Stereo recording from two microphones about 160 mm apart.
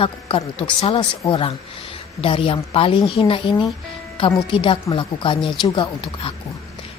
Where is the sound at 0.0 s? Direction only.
35° left (ahead or behind).